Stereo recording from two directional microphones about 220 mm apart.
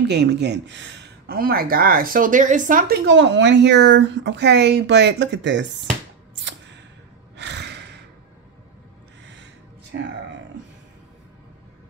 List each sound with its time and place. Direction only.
0.1 s speech: 50° right (ahead or behind)
3.1 s speech: 55° right (ahead or behind)
6.3 s a sound: 55° right (ahead or behind)
7.3 s sigh: 50° right (ahead or behind)
9.2 s owl: 55° right (ahead or behind)
9.9 s a sound: 55° right (ahead or behind)